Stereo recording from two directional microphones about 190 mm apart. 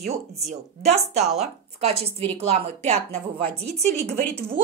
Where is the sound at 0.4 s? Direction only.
35° right (ahead or behind).